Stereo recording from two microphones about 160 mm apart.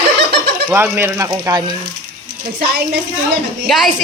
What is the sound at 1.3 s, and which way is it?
Speech, 25° right (ahead or behind).